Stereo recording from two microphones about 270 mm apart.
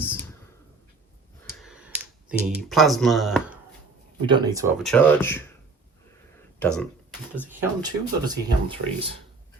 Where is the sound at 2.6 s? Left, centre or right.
Centre.